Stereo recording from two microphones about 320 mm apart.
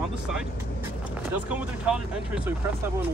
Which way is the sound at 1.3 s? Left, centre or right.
Centre.